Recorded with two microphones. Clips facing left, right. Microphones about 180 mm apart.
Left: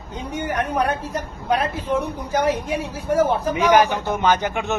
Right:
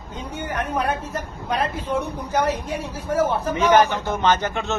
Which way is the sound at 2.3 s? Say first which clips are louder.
Left 2 dB; 10° left (ahead or behind).